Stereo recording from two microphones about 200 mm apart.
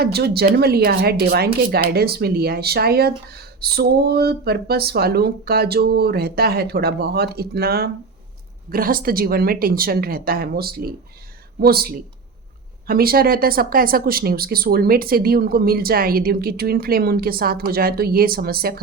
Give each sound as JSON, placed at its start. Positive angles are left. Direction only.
{"t": 0.0, "sound": "speech", "side_deg": -55}